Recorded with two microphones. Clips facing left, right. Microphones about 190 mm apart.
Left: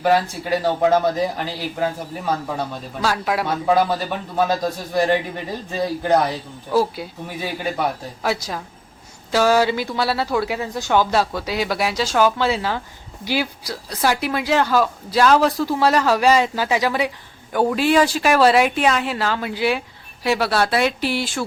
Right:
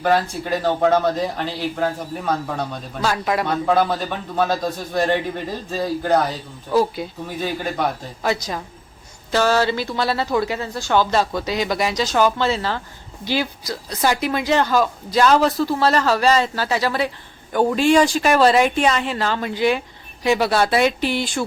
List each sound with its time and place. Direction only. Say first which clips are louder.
0.0 s speech: left 1 dB; 5° left (ahead or behind)